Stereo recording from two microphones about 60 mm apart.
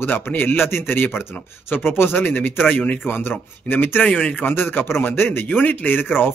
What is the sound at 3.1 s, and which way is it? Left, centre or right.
Speech, left.